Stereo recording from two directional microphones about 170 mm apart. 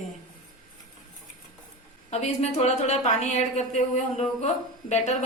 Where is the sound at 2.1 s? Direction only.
40° left (ahead or behind).